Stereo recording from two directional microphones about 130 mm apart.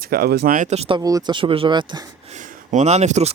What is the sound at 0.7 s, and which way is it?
Speech, 55° right (ahead or behind).